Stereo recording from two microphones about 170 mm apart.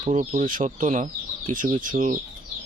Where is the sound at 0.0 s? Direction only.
40° right (ahead or behind).